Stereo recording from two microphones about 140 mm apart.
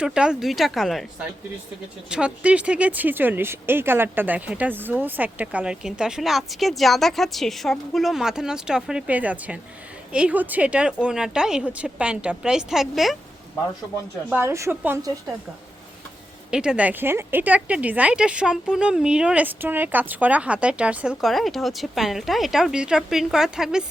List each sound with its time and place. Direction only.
0.0 s speech: 5° right (ahead or behind)
14.3 s speech: 20° right (ahead or behind)
16.5 s speech: 5° right (ahead or behind)